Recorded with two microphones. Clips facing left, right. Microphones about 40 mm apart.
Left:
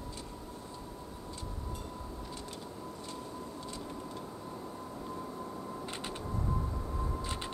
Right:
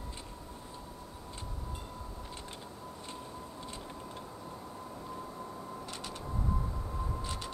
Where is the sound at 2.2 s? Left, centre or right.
Right.